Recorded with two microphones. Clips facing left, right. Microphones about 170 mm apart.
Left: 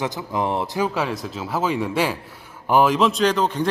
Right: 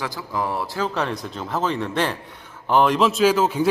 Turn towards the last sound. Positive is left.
turn(degrees=-5)  # may be behind; listen again after turning